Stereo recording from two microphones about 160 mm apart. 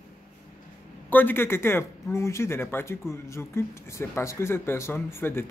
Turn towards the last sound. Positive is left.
turn(degrees=15)  # may be behind; listen again after turning